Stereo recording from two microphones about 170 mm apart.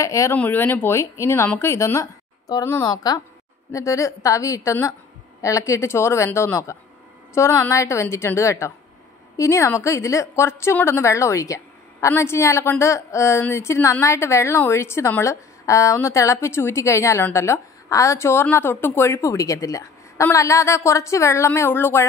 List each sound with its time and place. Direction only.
0.0 s a woman's voice: 15° left (ahead or behind)